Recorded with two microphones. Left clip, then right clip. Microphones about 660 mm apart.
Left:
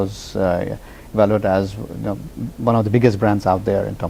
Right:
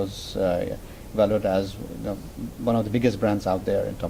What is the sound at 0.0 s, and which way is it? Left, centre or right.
A man's voice, left.